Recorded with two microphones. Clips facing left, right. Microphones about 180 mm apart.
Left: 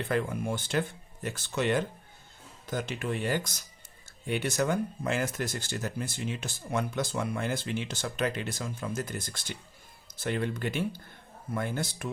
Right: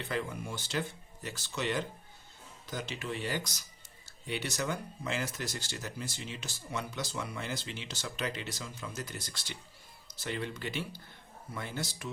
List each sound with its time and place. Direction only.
0.0 s speech: 55° left (ahead or behind)